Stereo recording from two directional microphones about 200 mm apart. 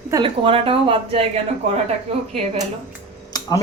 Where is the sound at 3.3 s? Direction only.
20° left (ahead or behind).